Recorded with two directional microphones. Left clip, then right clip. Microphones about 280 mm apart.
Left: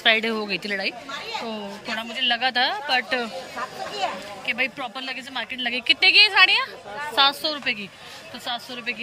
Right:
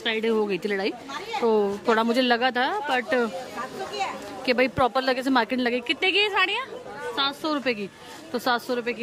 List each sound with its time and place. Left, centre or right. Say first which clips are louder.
0.0 s speech: left 4 dB; centre
4.5 s speech: right 4 dB; centre